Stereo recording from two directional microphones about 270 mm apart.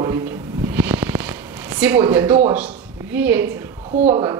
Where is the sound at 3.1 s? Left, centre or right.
Centre.